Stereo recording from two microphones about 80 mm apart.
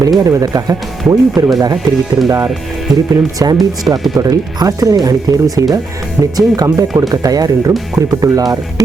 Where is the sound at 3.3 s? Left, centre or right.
Right.